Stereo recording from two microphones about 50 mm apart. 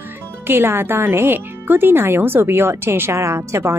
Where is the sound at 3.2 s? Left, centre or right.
Right.